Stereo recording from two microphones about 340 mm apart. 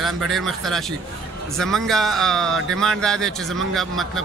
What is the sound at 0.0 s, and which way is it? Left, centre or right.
Speech, centre.